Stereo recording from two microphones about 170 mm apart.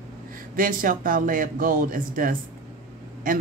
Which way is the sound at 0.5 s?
55° right (ahead or behind).